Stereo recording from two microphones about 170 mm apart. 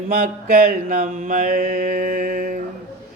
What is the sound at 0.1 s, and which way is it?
Mantra, 60° right (ahead or behind).